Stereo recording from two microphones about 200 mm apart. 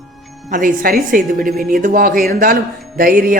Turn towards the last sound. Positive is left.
turn(degrees=-45)  # may be behind; listen again after turning